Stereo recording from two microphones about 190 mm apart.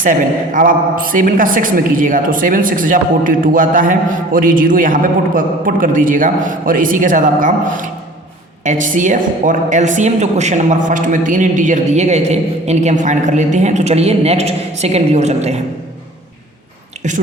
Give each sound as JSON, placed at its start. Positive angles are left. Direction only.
{"t": 0.0, "sound": "a woman's voice", "side_deg": -45}